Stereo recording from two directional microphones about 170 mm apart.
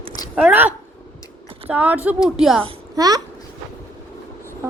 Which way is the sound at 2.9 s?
20° right (ahead or behind).